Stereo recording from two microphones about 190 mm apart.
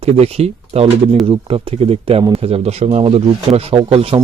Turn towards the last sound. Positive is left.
turn(degrees=-30)  # may be behind; listen again after turning